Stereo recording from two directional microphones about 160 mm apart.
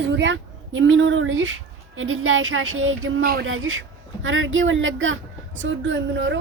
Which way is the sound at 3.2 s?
70° right (ahead or behind).